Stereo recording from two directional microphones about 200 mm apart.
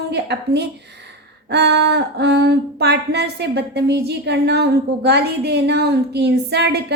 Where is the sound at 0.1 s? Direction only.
55° right (ahead or behind).